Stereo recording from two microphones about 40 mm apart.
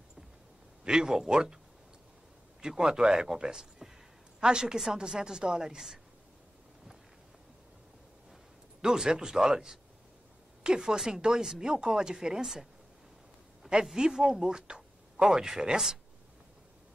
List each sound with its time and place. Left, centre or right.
0.8 s speech: centre
2.8 s speech: centre
8.8 s speech: centre
10.8 s speech: centre
11.7 s speech: centre
13.9 s speech: centre